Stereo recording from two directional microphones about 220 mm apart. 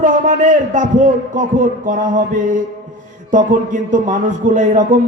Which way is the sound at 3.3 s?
35° right (ahead or behind).